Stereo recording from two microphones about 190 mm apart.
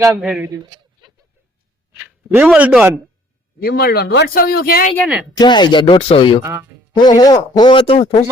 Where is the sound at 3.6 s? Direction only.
55° left (ahead or behind).